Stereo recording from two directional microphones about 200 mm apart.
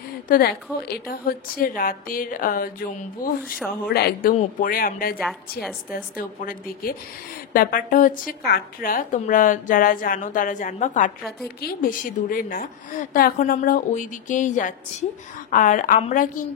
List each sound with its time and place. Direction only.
0.3 s a woman's voice: 50° left (ahead or behind)